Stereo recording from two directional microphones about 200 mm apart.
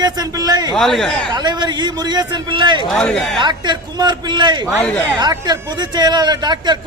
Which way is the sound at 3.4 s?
20° right (ahead or behind).